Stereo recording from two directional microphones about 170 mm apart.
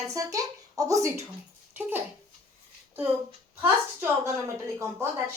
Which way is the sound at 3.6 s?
15° right (ahead or behind).